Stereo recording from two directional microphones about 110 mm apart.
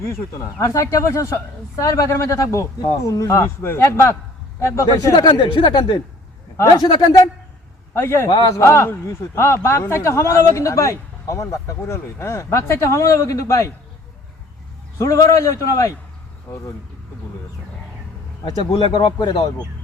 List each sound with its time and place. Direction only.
0.0 s a man's voice: 25° left (ahead or behind); by 7.1 s 45° left (ahead or behind)
7.9 s speech: 20° left (ahead or behind)
8.3 s a man's voice: 40° left (ahead or behind)
8.5 s speech: 25° left (ahead or behind)
14.9 s speech: 30° left (ahead or behind)
18.4 s speech: 45° left (ahead or behind)